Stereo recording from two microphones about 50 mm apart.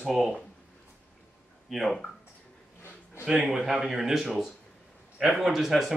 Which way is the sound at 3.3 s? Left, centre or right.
Centre.